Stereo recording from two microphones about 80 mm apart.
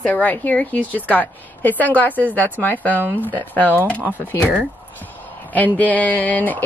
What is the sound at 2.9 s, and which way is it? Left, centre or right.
Speech, right.